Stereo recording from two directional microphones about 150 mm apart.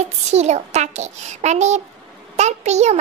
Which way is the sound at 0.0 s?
50° right (ahead or behind).